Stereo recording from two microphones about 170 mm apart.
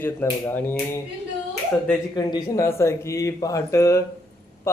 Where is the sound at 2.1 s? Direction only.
20° left (ahead or behind).